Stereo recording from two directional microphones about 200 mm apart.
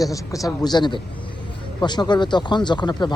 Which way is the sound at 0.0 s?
15° left (ahead or behind).